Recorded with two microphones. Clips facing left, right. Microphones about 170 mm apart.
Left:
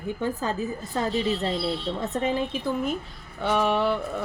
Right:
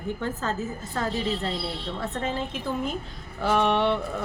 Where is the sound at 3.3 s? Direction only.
Centre (ahead or behind).